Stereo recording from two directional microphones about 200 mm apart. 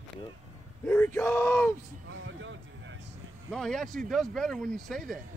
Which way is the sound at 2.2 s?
70° right (ahead or behind).